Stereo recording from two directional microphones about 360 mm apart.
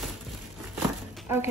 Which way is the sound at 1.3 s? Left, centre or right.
Centre.